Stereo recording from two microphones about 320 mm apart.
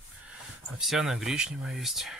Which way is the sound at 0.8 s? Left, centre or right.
Centre.